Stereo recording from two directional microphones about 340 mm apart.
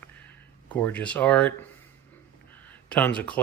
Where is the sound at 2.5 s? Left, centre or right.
Centre.